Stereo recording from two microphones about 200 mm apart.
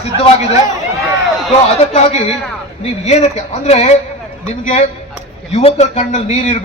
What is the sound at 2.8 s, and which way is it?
Speech, 30° left (ahead or behind).